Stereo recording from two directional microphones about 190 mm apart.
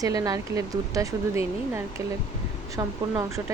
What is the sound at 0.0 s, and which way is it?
Speech, 20° right (ahead or behind).